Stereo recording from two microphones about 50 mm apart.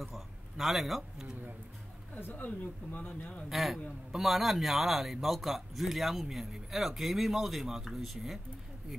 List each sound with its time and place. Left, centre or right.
0.0 s a sound: centre
2.3 s speech: left
3.4 s a man's voice: centre